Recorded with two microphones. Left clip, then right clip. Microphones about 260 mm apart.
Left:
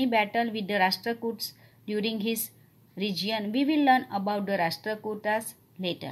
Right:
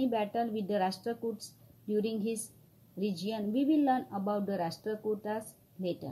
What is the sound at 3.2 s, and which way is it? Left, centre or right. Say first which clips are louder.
A woman's voice: left 3 dB; left.